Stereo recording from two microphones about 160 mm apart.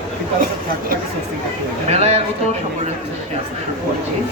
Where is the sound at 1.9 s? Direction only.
40° right (ahead or behind).